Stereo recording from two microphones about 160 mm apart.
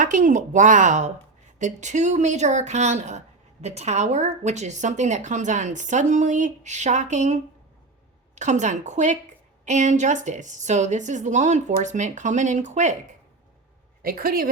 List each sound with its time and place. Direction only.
0.0 s speech: 55° right (ahead or behind)
8.4 s speech: 50° right (ahead or behind)
14.0 s a woman's voice: 65° right (ahead or behind)